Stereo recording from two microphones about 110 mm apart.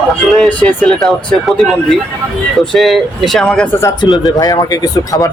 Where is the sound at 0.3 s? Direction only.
10° left (ahead or behind).